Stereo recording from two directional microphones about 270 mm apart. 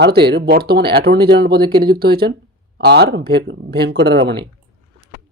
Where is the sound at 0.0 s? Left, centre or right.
Right.